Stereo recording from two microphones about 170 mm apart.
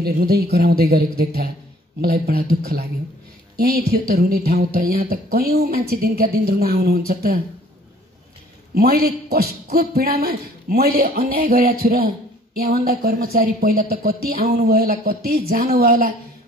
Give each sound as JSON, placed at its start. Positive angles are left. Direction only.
{"t": 0.0, "sound": "speech", "side_deg": -65}
{"t": 8.7, "sound": "speech", "side_deg": -65}